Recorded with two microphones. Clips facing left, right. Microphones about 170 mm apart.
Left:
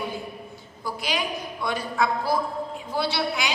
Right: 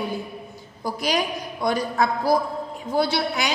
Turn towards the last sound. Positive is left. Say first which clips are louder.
# right 3 dB
turn(degrees=-45)  # may be behind; listen again after turning